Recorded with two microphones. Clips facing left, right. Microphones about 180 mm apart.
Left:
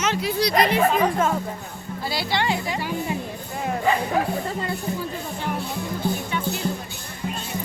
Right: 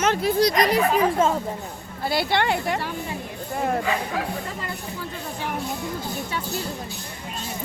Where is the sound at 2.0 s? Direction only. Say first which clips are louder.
Right 3 dB; 55° right (ahead or behind).